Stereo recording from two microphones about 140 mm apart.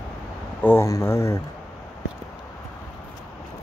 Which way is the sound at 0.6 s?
20° left (ahead or behind).